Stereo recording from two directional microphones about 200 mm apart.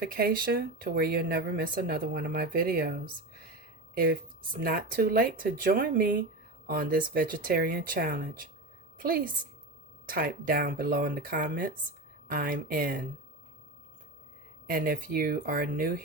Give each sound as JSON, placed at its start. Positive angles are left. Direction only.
{"t": 0.0, "sound": "a woman's voice", "side_deg": -50}
{"t": 14.7, "sound": "speech", "side_deg": -45}